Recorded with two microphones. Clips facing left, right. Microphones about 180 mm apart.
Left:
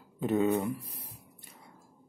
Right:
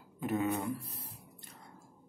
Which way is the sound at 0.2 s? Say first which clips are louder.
Left 6 dB; 25° left (ahead or behind).